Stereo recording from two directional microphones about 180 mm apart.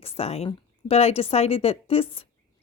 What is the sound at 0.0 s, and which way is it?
Speech, 35° left (ahead or behind).